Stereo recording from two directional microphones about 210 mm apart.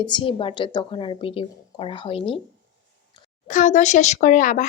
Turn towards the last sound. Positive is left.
turn(degrees=40)  # may be behind; listen again after turning